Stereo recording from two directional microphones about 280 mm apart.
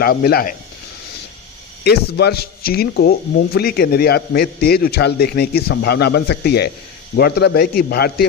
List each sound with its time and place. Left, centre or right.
0.0 s speech: left
1.8 s speech: left